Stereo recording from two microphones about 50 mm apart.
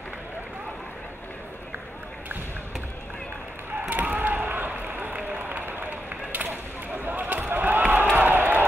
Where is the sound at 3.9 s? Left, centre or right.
Right.